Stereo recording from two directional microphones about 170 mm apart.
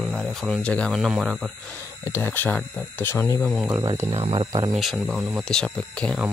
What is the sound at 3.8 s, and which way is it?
Speech, 25° right (ahead or behind).